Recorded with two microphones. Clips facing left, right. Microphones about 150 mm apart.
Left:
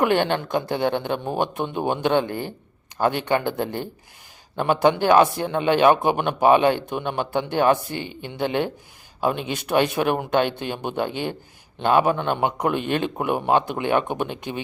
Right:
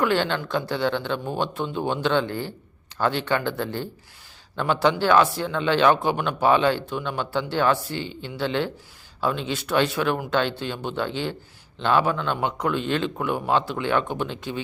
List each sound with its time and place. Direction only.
0.0 s speech: 20° left (ahead or behind)